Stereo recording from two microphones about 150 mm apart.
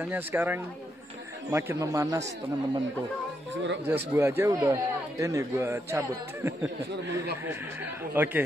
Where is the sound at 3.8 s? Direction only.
15° right (ahead or behind).